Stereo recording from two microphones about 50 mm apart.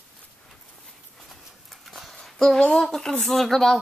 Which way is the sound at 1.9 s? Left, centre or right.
Centre.